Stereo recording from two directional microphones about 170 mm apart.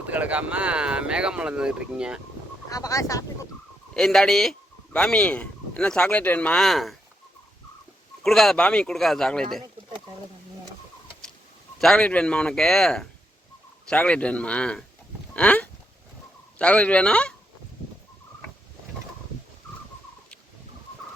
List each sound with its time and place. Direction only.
0.1 s speech: 10° right (ahead or behind)
2.6 s speech: 20° left (ahead or behind)
3.9 s speech: 5° left (ahead or behind)
8.2 s speech: centre (ahead or behind)
11.8 s speech: 5° left (ahead or behind)
15.3 s cattle: 10° left (ahead or behind)
16.6 s speech: 5° left (ahead or behind)